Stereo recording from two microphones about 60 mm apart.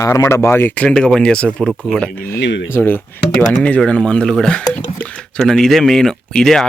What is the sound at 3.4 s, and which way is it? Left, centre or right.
Speech, left.